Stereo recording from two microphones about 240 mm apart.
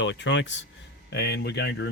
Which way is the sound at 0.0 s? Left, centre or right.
Left.